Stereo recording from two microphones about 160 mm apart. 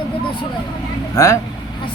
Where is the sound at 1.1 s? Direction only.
20° left (ahead or behind).